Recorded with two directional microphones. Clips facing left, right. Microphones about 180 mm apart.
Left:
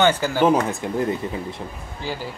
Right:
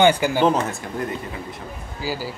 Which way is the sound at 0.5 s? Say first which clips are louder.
Left 2 dB; 15° left (ahead or behind).